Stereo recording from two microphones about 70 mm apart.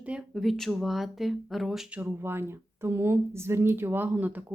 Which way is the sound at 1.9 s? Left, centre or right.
Right.